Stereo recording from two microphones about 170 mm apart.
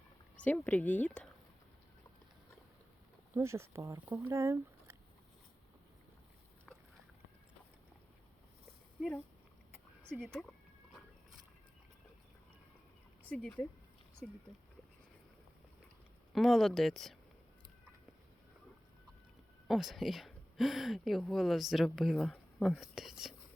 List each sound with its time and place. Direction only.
0.3 s speech: 10° left (ahead or behind)
3.3 s speech: 15° right (ahead or behind)
10.0 s a sound: 5° left (ahead or behind)
13.2 s speech: 10° left (ahead or behind)
16.3 s speech: centre (ahead or behind)
19.6 s speech: centre (ahead or behind)